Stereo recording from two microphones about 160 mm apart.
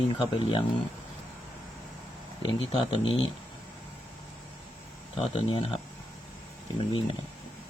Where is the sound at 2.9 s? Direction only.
35° left (ahead or behind).